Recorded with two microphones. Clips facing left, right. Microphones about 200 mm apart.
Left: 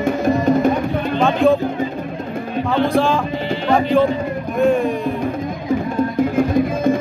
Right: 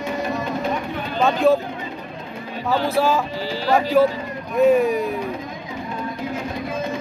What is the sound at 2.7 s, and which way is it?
Speech, 5° right (ahead or behind).